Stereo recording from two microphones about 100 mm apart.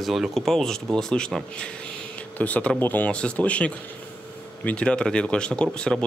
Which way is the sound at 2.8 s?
15° left (ahead or behind).